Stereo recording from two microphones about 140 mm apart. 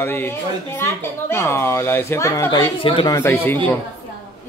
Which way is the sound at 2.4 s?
35° left (ahead or behind).